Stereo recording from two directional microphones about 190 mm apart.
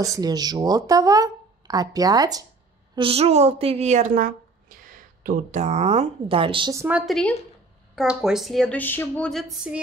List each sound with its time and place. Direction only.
0.0 s speech: 20° right (ahead or behind)
3.0 s a woman's voice: 30° right (ahead or behind)
6.7 s speech: 15° right (ahead or behind)
7.0 s a woman's voice: centre (ahead or behind)